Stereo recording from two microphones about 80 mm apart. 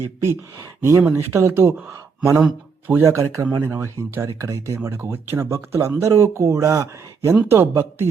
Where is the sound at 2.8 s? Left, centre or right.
Right.